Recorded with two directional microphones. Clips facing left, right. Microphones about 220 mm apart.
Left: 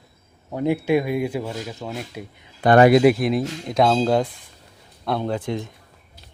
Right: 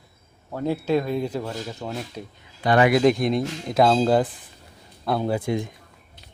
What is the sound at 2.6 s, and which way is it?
Speech, 50° left (ahead or behind).